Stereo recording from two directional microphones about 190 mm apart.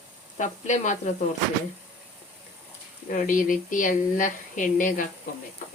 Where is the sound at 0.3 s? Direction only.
40° left (ahead or behind).